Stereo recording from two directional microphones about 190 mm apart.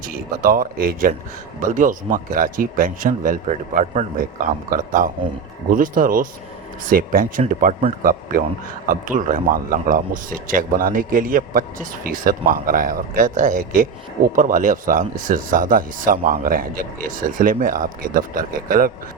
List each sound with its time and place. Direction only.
0.0 s speech: 50° right (ahead or behind)